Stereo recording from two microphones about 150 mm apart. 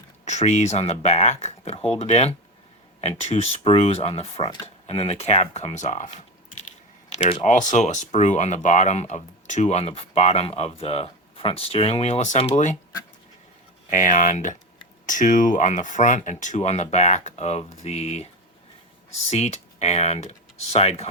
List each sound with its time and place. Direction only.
0.3 s speech: 50° left (ahead or behind)
7.1 s speech: 40° left (ahead or behind)
7.4 s speech: 55° left (ahead or behind)
13.9 s speech: 60° left (ahead or behind)
19.3 s speech: 45° left (ahead or behind)